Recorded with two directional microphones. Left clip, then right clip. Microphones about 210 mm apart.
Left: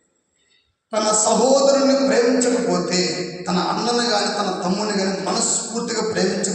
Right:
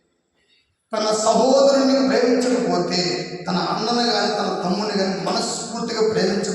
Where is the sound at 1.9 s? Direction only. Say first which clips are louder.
Left 1 dB; 30° left (ahead or behind).